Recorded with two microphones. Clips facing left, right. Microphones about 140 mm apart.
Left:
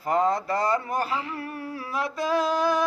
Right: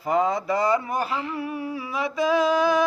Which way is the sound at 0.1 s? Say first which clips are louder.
Right 1 dB; 10° right (ahead or behind).